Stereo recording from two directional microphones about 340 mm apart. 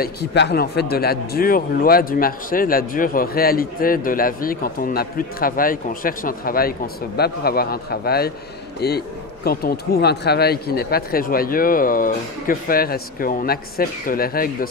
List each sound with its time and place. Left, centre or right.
0.0 s speech: left